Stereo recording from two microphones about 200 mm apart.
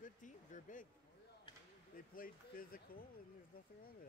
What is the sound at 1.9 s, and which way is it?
Speech, 45° left (ahead or behind).